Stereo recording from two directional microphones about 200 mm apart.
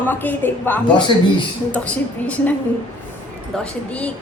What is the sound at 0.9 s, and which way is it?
Speech, 25° left (ahead or behind).